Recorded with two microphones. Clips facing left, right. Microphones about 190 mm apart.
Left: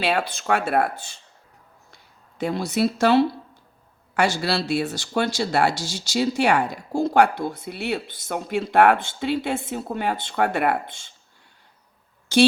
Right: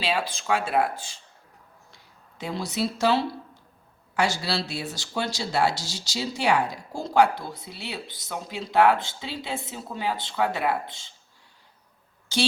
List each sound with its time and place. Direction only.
0.0 s speech: 60° left (ahead or behind)
2.4 s speech: 55° left (ahead or behind)